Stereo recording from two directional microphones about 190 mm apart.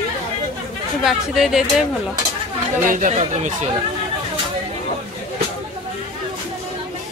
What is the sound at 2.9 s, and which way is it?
Speech, 40° right (ahead or behind).